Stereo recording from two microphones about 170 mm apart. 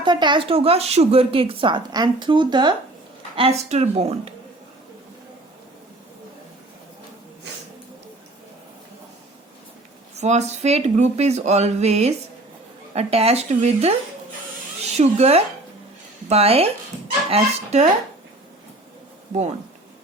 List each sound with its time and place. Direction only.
0.0 s speech: 25° right (ahead or behind)
3.7 s speech: 40° right (ahead or behind)
10.2 s speech: 40° right (ahead or behind)
14.9 s speech: 35° right (ahead or behind)
19.3 s speech: 40° right (ahead or behind)